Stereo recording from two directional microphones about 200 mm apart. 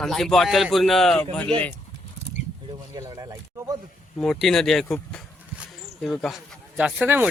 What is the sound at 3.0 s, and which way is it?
Speech, 15° right (ahead or behind).